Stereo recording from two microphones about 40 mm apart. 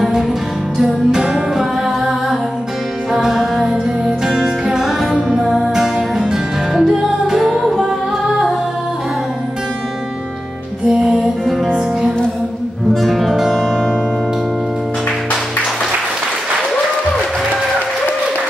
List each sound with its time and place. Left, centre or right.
0.7 s music: centre
11.4 s music: centre
12.9 s music: centre
13.3 s music: centre